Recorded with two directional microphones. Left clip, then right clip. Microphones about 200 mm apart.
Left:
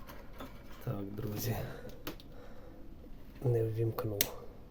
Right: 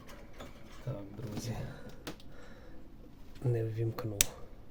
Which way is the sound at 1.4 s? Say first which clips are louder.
Left 2 dB; 40° left (ahead or behind).